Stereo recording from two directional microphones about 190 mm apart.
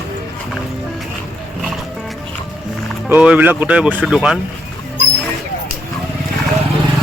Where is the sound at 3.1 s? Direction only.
5° right (ahead or behind).